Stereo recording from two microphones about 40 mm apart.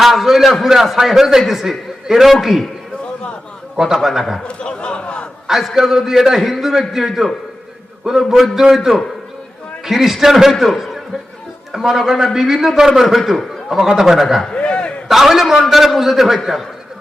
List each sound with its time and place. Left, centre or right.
0.0 s a man's voice: centre
3.9 s a man's voice: centre
4.4 s speech: left
5.5 s a man's voice: centre
11.7 s a man's voice: centre
14.4 s a sound: left
15.0 s a man's voice: centre